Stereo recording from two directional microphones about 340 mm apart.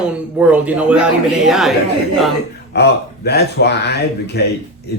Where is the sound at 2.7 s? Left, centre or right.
Left.